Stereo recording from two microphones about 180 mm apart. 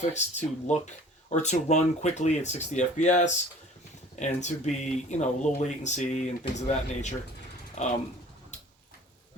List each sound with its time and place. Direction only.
0.0 s speech: 40° left (ahead or behind)